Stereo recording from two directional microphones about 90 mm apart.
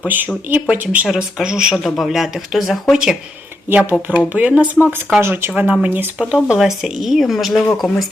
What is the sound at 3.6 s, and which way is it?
Speech, 25° right (ahead or behind).